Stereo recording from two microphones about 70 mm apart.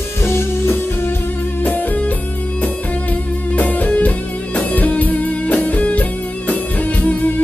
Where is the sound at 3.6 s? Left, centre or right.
Left.